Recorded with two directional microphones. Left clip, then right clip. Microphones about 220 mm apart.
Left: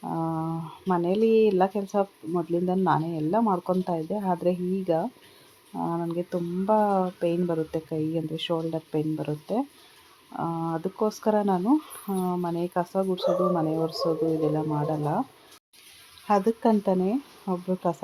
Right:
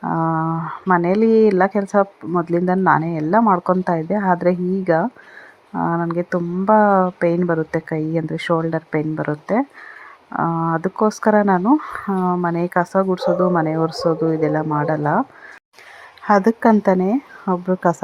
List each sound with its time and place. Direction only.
0.0 s a sound: 25° right (ahead or behind)
1.3 s speech: 25° right (ahead or behind)
16.2 s speech: 25° right (ahead or behind)